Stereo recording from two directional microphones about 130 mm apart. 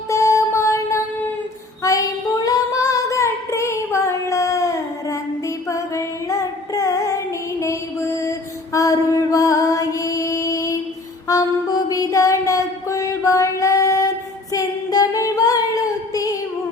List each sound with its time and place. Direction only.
0.1 s music: 25° left (ahead or behind)
1.8 s female singing: 25° left (ahead or behind)
8.2 s music: 25° left (ahead or behind)
11.3 s a sound: 30° left (ahead or behind)
14.5 s singing: 30° left (ahead or behind)